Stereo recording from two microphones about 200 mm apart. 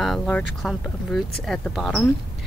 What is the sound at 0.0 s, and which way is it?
Speech, centre (ahead or behind).